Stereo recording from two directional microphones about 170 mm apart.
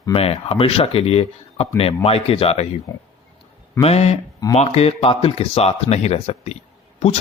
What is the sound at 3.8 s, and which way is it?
Speech, 40° left (ahead or behind).